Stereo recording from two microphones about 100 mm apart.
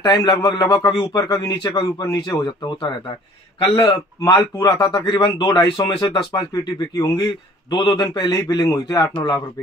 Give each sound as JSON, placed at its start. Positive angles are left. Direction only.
{"t": 0.0, "sound": "a man's voice", "side_deg": 45}
{"t": 7.7, "sound": "speech", "side_deg": 50}